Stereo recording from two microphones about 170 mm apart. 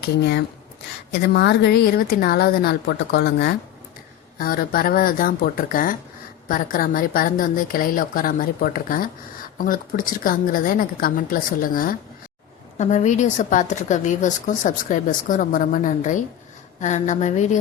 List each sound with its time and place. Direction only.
0.2 s speech: 90° left
1.3 s speech: 80° left
4.4 s a woman's voice: 60° left (ahead or behind)
12.8 s speech: 45° left (ahead or behind)